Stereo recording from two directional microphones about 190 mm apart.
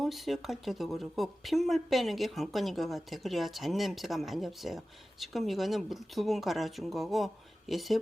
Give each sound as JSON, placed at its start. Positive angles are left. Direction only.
{"t": 0.0, "sound": "speech", "side_deg": 0}